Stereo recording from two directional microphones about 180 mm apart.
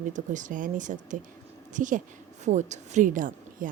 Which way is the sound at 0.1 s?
45° right (ahead or behind).